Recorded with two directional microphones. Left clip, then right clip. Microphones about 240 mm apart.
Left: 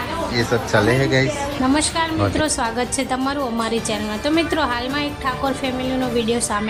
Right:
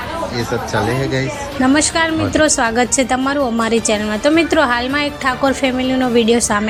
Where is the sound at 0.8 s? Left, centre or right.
Centre.